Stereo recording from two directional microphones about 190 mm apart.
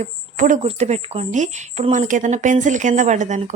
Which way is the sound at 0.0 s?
40° right (ahead or behind).